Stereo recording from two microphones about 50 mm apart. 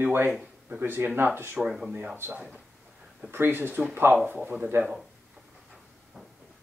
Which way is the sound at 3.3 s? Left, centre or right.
Right.